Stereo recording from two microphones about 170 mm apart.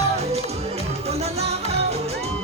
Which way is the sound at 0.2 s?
40° right (ahead or behind).